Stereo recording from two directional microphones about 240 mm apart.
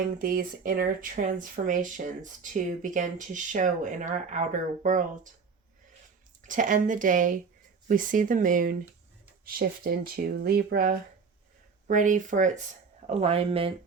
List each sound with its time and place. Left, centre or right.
0.2 s speech: right
6.4 s speech: right